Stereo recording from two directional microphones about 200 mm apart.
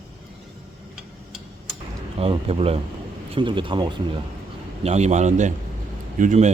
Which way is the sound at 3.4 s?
25° right (ahead or behind).